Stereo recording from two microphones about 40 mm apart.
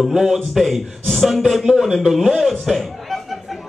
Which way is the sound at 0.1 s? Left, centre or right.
Centre.